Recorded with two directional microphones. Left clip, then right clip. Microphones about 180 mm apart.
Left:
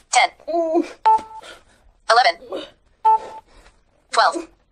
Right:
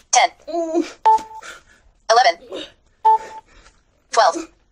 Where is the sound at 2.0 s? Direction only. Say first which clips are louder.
Right 1 dB; 35° right (ahead or behind).